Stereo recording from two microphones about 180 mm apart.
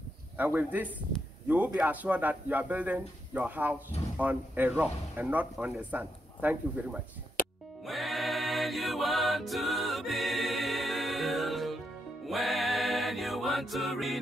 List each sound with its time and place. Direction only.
0.4 s speech: 10° right (ahead or behind)
7.4 s music: 50° left (ahead or behind)
7.8 s music: centre (ahead or behind)